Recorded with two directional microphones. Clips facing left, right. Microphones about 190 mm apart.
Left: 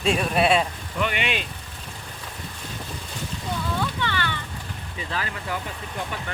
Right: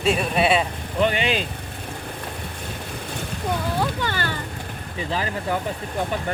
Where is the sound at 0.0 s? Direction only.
Centre (ahead or behind).